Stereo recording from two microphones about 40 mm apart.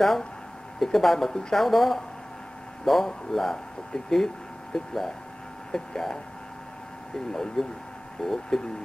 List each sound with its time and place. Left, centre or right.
0.9 s speech: centre
7.2 s speech: centre